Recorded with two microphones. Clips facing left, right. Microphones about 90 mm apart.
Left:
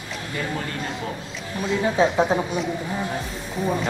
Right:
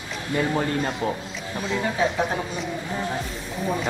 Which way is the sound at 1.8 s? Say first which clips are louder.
Left 5 dB; 20° left (ahead or behind).